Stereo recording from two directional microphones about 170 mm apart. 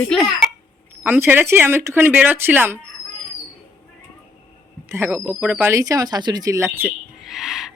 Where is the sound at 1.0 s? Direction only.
10° right (ahead or behind).